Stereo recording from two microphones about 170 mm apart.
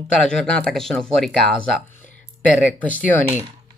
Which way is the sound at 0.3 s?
5° left (ahead or behind).